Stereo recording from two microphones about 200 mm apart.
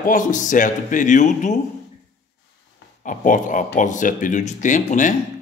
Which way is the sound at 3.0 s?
40° left (ahead or behind).